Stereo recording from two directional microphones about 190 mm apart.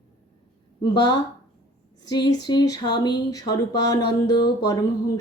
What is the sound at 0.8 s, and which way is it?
Speech, 20° left (ahead or behind).